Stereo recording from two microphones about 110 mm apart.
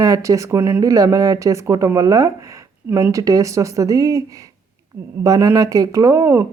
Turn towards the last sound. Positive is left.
turn(degrees=-25)  # may be behind; listen again after turning